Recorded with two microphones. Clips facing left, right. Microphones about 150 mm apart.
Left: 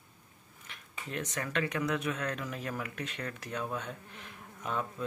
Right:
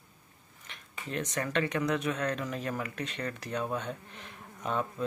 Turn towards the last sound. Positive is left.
turn(degrees=0)  # may be behind; listen again after turning